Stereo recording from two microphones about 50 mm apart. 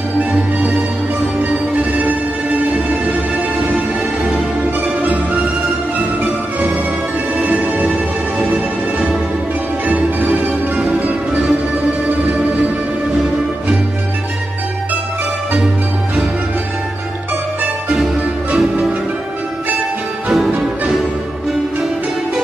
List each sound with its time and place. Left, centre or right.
0.2 s music: right
2.0 s music: right
3.6 s music: centre
4.8 s music: right
7.3 s music: right
9.8 s music: right
17.9 s music: centre
20.5 s music: centre